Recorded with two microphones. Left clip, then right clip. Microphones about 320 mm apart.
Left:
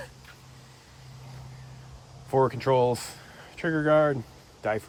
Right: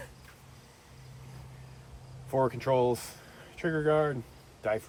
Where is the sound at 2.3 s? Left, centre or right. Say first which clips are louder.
Left 4 dB; left.